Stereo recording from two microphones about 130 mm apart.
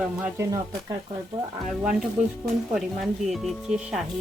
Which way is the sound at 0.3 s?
25° right (ahead or behind).